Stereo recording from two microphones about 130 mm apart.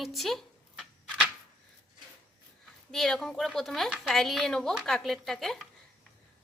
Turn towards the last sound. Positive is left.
turn(degrees=0)  # may be behind; listen again after turning